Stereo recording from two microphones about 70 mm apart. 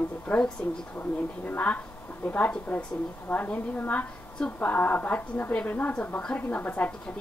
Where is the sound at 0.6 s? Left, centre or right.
Centre.